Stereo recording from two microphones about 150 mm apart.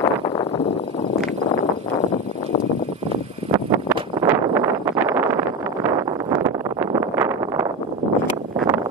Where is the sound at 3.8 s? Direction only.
15° right (ahead or behind).